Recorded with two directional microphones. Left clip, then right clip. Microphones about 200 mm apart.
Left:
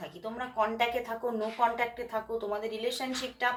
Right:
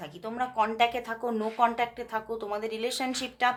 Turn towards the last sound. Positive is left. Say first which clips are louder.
# right 4 dB
turn(degrees=-45)  # may be behind; listen again after turning